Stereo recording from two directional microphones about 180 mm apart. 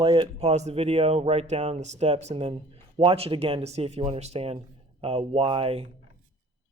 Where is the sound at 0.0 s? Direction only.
30° right (ahead or behind).